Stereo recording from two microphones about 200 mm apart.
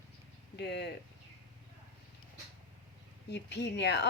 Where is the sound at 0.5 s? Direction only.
55° left (ahead or behind).